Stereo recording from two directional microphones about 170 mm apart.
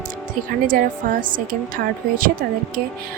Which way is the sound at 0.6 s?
55° right (ahead or behind).